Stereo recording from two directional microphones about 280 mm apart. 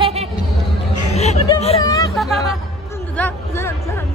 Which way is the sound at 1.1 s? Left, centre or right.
Left.